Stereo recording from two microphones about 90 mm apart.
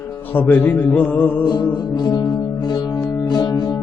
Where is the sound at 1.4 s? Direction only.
55° left (ahead or behind).